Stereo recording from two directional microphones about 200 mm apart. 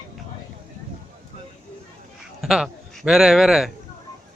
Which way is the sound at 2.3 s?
Centre (ahead or behind).